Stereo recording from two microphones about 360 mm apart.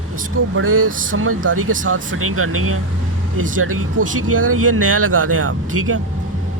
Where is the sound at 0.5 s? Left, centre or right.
Right.